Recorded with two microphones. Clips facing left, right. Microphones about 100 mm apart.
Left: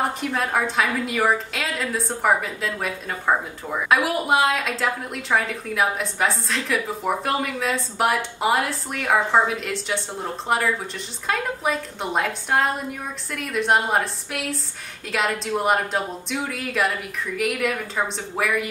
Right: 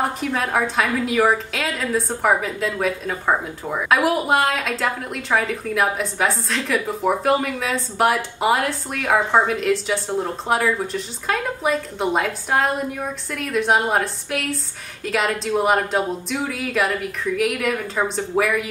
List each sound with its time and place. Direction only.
0.0 s a woman's voice: centre (ahead or behind)